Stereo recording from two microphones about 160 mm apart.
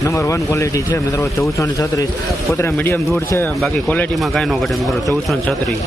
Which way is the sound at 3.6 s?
Centre (ahead or behind).